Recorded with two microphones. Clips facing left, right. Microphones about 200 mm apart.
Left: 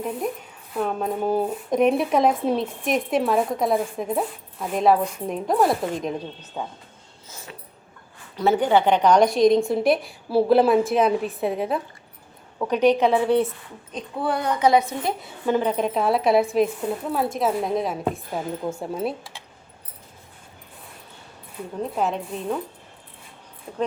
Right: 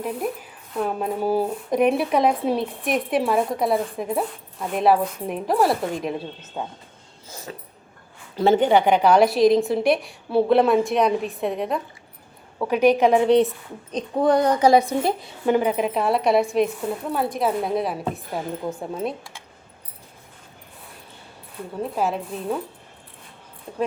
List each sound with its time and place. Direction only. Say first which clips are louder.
0.0 s speech: even; centre (ahead or behind)
7.3 s a sound: right 6 dB; 35° right (ahead or behind)
8.4 s speech: right 2 dB; 25° right (ahead or behind); by 11.8 s 5° left (ahead or behind)
12.5 s a woman's voice: right 1 dB; 10° right (ahead or behind)
13.9 s a child's voice: right 7 dB; 40° right (ahead or behind)
15.4 s speech: right 2 dB; 10° right (ahead or behind); by 19.1 s 5° left (ahead or behind)
21.8 s speech: right 1 dB; 5° right (ahead or behind)